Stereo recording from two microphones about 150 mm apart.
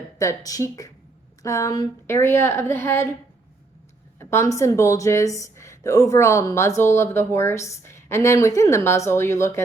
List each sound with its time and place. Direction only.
0.2 s speech: 20° left (ahead or behind)
4.2 s speech: 15° left (ahead or behind)